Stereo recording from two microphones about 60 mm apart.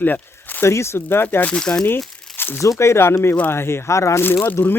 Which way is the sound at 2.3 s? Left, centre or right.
Left.